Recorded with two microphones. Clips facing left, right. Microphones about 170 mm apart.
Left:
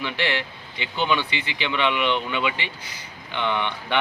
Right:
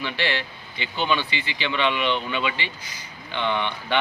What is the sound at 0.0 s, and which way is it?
Speech, 15° left (ahead or behind).